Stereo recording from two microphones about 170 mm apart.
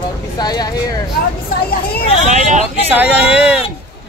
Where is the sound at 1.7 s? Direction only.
60° left (ahead or behind).